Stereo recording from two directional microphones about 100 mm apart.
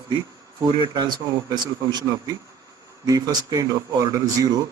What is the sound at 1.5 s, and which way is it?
A man's voice, 45° right (ahead or behind).